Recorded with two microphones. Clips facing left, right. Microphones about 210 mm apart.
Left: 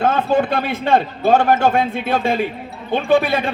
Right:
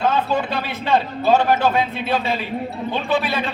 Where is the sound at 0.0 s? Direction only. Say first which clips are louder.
Left 4 dB; 50° left (ahead or behind).